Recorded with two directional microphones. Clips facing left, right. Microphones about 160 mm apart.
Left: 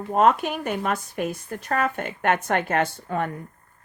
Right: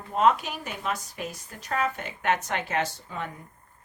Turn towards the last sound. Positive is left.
turn(degrees=55)  # may be behind; listen again after turning